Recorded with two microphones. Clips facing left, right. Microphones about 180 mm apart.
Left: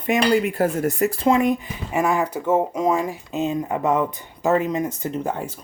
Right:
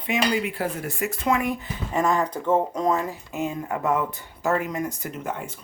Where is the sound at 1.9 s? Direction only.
10° left (ahead or behind); by 5.4 s 30° left (ahead or behind).